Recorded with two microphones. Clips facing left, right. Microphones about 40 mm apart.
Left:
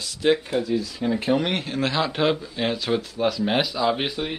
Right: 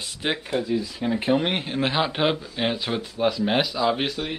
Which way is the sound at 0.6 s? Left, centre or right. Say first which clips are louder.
Left 1 dB; centre.